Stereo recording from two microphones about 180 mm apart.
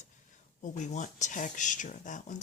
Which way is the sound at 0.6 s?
40° left (ahead or behind).